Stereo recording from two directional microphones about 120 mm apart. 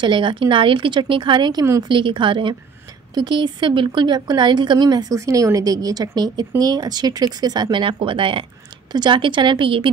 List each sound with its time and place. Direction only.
0.0 s speech: 40° right (ahead or behind)